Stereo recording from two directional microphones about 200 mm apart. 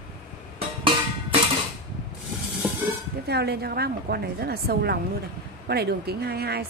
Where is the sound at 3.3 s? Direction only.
55° right (ahead or behind).